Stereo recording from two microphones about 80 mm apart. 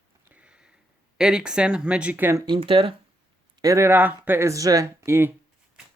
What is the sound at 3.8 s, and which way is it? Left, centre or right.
Speech, right.